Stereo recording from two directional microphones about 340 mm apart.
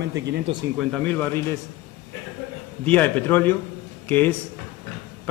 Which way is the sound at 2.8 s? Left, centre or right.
Centre.